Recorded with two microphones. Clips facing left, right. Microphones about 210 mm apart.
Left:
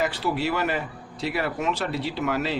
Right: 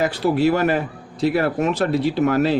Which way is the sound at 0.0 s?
45° right (ahead or behind).